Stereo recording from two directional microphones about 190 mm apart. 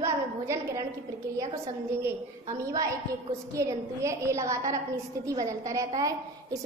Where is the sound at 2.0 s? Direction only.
15° right (ahead or behind).